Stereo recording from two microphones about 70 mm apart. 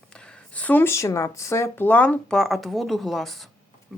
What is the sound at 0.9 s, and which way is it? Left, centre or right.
Speech, left.